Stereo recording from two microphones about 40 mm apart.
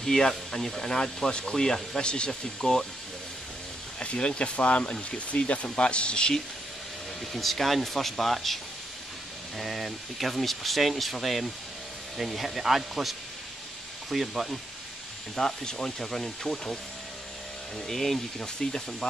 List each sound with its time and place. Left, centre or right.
0.0 s speech: centre
4.0 s speech: left
7.3 s speech: centre
9.6 s speech: centre
14.1 s speech: centre
15.3 s speech: centre
17.7 s speech: centre